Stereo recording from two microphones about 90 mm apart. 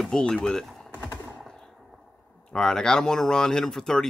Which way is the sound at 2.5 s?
5° left (ahead or behind).